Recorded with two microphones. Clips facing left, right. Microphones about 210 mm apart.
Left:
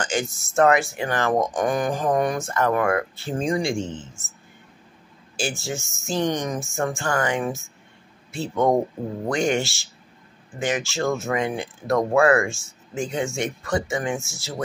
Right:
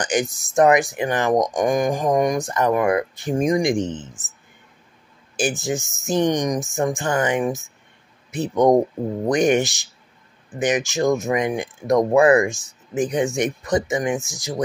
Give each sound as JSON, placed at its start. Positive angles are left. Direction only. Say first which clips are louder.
{"t": 0.0, "sound": "speech", "louder": "right 4 dB", "side_deg": -15}
{"t": 5.4, "sound": "speech", "louder": "right 5 dB", "side_deg": -15}